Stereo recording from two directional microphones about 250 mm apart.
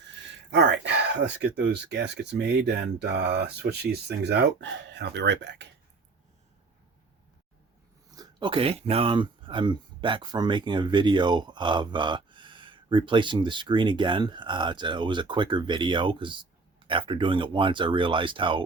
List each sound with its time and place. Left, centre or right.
0.5 s speech: right
8.1 s speech: centre